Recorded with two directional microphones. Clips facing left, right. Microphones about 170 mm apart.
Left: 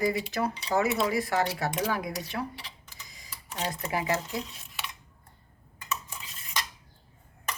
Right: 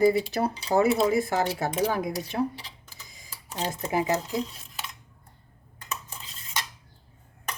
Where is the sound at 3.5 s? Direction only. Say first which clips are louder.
Right 4 dB; 30° right (ahead or behind).